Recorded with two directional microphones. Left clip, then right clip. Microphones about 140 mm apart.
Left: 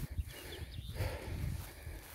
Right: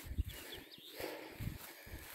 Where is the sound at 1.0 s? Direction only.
50° left (ahead or behind).